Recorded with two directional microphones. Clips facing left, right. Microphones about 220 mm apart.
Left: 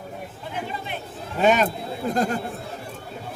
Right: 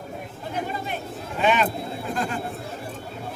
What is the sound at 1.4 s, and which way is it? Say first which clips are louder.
Speech: left 3 dB; 40° left (ahead or behind).